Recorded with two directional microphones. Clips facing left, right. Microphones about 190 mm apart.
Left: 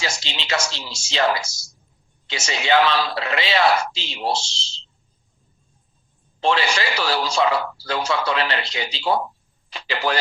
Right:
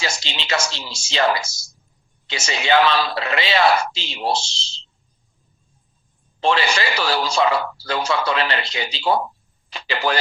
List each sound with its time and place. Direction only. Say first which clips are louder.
0.0 s speech: right 1 dB; 60° right (ahead or behind)
6.4 s speech: right 1 dB; 60° right (ahead or behind)